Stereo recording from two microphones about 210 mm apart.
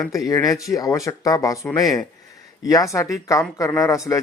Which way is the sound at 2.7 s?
15° left (ahead or behind).